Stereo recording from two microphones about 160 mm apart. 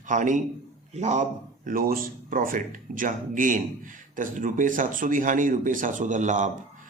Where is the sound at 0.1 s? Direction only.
50° right (ahead or behind).